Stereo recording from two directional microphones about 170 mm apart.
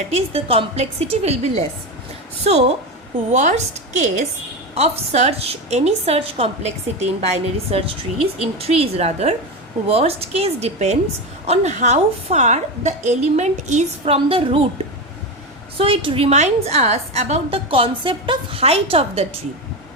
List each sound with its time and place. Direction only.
0.1 s a woman's voice: 35° right (ahead or behind)
15.8 s a woman's voice: 30° right (ahead or behind)